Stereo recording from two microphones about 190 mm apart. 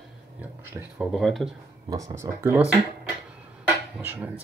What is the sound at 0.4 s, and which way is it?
Speech, 5° right (ahead or behind).